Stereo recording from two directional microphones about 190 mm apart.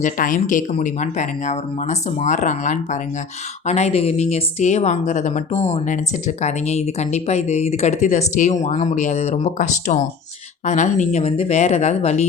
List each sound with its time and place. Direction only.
0.0 s speech: 45° left (ahead or behind)